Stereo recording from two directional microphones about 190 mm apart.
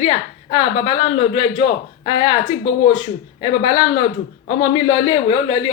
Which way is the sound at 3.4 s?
25° left (ahead or behind).